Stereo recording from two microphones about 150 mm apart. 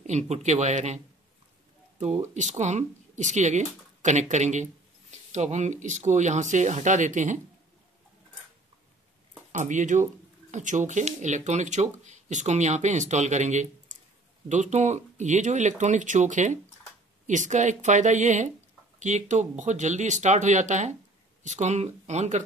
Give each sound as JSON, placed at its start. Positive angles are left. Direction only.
{"t": 0.0, "sound": "speech", "side_deg": -50}
{"t": 9.5, "sound": "speech", "side_deg": -55}